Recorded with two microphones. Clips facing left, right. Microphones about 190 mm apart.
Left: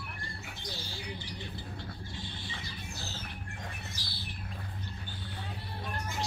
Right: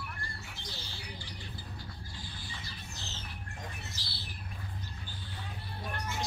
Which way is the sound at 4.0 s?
10° left (ahead or behind).